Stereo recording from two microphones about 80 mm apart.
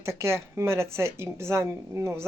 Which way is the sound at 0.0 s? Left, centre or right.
Right.